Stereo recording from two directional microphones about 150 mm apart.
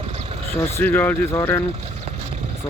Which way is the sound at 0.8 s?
10° left (ahead or behind).